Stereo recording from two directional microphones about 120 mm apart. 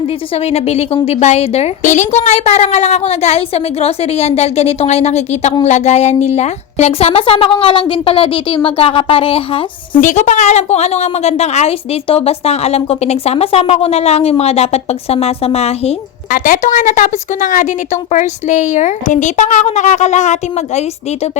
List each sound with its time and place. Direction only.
0.5 s a woman's voice: 60° left (ahead or behind)
10.0 s a woman's voice: 85° left; by 16.0 s 60° left (ahead or behind)
16.4 s speech: 90° left